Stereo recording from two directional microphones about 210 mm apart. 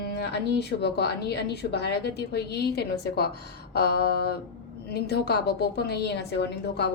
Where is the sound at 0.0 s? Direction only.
50° left (ahead or behind).